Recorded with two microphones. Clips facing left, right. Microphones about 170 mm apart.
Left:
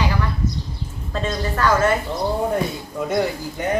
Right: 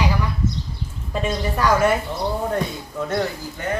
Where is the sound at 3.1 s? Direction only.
15° left (ahead or behind).